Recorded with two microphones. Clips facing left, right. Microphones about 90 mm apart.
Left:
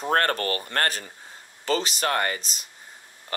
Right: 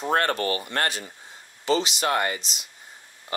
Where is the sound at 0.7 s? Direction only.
45° left (ahead or behind).